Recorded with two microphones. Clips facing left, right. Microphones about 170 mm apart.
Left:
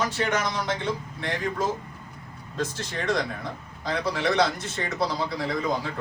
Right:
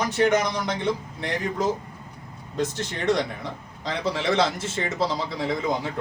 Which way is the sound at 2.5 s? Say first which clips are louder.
Right 3 dB; 20° right (ahead or behind).